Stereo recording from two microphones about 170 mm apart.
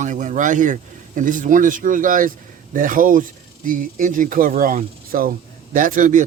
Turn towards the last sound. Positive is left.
turn(degrees=-50)  # may be behind; listen again after turning